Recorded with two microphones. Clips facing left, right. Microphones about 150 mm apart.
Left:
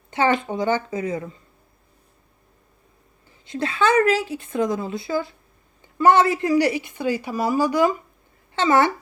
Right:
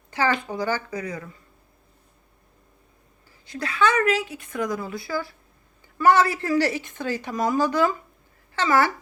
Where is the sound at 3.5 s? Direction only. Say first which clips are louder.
Left 2 dB; 25° left (ahead or behind).